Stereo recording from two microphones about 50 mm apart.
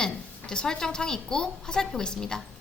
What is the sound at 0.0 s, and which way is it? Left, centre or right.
A woman's voice, centre.